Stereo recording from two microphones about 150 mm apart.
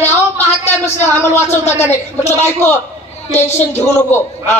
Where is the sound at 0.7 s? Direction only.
15° left (ahead or behind).